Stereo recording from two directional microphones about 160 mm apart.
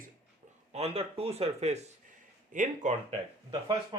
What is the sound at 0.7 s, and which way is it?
Speech, 40° right (ahead or behind).